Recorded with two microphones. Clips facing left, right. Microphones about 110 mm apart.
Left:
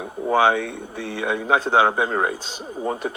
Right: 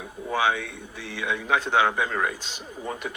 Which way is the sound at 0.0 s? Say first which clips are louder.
Left 7 dB; 45° left (ahead or behind).